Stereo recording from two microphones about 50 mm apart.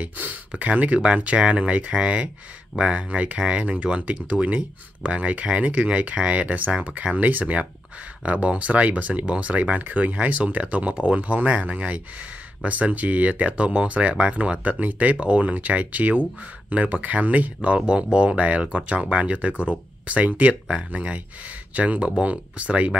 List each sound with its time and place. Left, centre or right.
0.0 s speech: right
7.2 s speech: right